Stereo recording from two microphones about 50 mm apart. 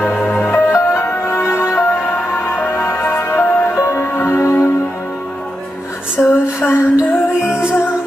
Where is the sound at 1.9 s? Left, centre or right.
Left.